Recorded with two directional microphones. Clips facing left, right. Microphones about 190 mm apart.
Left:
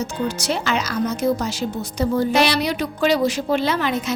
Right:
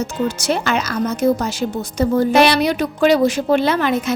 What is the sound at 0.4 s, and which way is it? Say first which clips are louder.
A woman's voice: right 3 dB; 50° right (ahead or behind).